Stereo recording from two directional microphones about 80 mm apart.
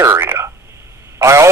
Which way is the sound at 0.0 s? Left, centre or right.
Right.